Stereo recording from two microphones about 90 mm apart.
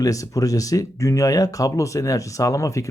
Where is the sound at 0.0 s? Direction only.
40° left (ahead or behind).